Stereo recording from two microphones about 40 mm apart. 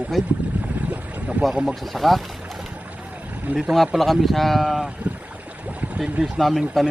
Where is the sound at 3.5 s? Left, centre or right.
Right.